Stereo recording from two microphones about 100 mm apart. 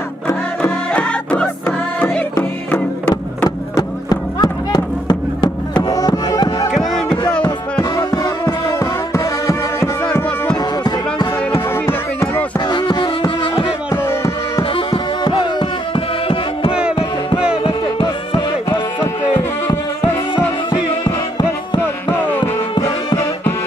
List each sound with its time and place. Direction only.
0.3 s music: 10° left (ahead or behind)
3.4 s music: 45° left (ahead or behind)
6.7 s music: centre (ahead or behind)
7.9 s music: 40° left (ahead or behind)
10.5 s music: 45° left (ahead or behind)
11.5 s music: 25° left (ahead or behind)
12.5 s music: 50° left (ahead or behind)
13.9 s music: 25° left (ahead or behind)
14.6 s music: 55° left (ahead or behind)
17.6 s music: 55° left (ahead or behind)
20.7 s music: 45° left (ahead or behind)
22.1 s music: 20° left (ahead or behind)
22.8 s music: 40° left (ahead or behind)